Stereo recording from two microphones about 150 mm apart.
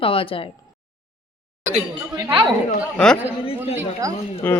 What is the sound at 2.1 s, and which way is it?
Speech, 30° right (ahead or behind).